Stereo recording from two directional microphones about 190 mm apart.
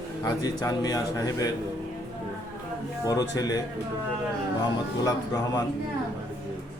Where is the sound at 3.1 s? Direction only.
20° left (ahead or behind).